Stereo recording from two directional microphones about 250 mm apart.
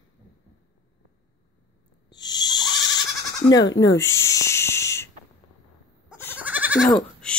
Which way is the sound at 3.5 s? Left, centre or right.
Centre.